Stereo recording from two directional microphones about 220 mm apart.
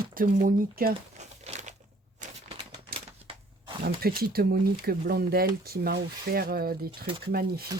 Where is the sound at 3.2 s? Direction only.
25° right (ahead or behind).